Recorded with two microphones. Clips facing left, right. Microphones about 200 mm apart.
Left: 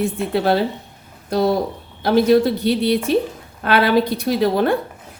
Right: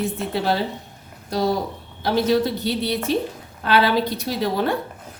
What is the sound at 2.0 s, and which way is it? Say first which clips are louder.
A woman's voice: left 5 dB; 55° left (ahead or behind).